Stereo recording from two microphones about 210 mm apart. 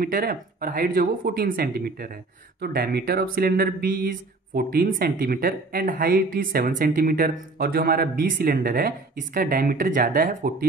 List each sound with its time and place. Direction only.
0.0 s speech: 45° right (ahead or behind)